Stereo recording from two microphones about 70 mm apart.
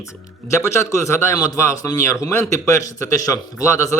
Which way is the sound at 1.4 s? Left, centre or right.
Left.